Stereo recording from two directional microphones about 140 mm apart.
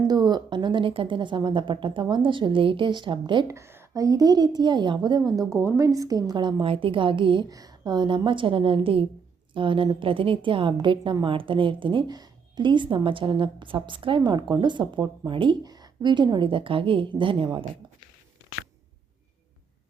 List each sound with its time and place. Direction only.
0.1 s a woman's voice: 30° right (ahead or behind)
3.4 s a woman's voice: 20° right (ahead or behind); by 17.7 s 40° right (ahead or behind)